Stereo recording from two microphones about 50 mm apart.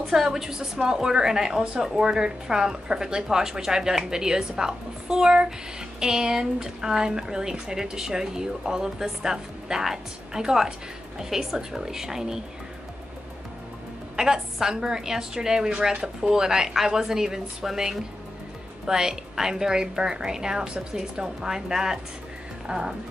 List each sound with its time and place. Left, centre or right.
0.1 s speech: centre
14.1 s speech: centre